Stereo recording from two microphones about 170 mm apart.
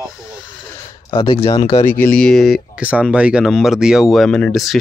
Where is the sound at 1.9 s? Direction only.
10° left (ahead or behind).